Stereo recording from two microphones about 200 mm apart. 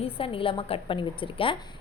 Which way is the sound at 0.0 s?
25° left (ahead or behind).